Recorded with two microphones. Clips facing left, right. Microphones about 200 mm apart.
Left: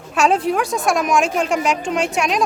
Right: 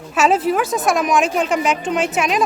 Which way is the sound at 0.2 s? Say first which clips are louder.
Right 1 dB; 5° right (ahead or behind).